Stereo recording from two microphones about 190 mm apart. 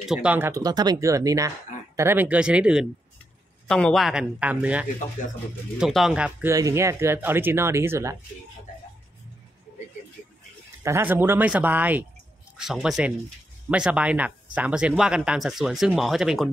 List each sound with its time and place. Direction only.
0.1 s speech: 5° right (ahead or behind)
6.5 s speech: 15° right (ahead or behind)
10.8 s speech: 15° right (ahead or behind)